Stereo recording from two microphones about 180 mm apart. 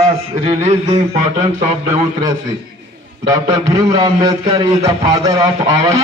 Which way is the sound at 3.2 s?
20° right (ahead or behind).